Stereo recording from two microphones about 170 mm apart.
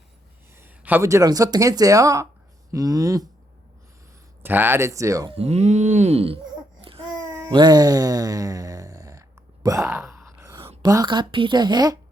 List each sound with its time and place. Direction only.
0.5 s speech: 10° right (ahead or behind)
4.4 s speech: 10° right (ahead or behind)
5.3 s groan: 40° right (ahead or behind)
6.8 s babbling: 30° right (ahead or behind)
9.6 s groan: 15° right (ahead or behind)
10.8 s speech: 25° right (ahead or behind)